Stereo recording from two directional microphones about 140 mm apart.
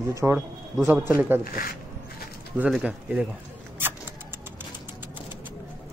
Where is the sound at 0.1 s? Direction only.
20° right (ahead or behind).